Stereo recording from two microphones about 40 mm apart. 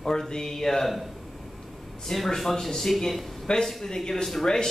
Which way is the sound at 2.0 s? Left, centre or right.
Centre.